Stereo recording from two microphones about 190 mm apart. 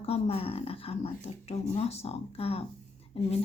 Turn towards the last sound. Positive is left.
turn(degrees=30)  # may be behind; listen again after turning